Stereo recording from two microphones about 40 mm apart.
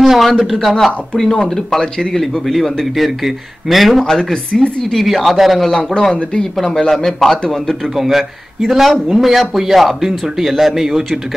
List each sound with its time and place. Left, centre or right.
0.0 s speech: centre
1.1 s a man's voice: centre
2.1 s speech: centre
4.1 s a man's voice: centre
4.9 s speech: centre
5.8 s a man's voice: left
7.9 s a man's voice: centre